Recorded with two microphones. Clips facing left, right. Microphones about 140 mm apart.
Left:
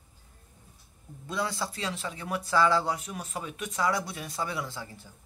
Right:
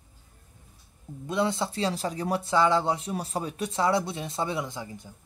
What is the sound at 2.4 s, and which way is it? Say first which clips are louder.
Speech: right 1 dB; 20° right (ahead or behind).